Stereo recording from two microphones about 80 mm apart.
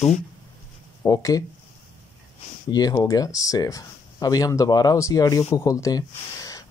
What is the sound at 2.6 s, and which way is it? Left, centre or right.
Speech, left.